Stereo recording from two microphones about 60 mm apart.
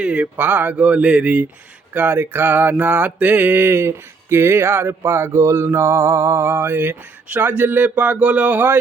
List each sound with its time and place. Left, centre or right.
0.0 s speech: centre
1.9 s mantra: right